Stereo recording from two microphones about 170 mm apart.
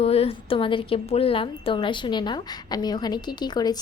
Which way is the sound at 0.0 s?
35° left (ahead or behind).